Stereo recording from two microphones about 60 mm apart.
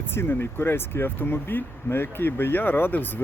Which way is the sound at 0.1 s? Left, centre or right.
Left.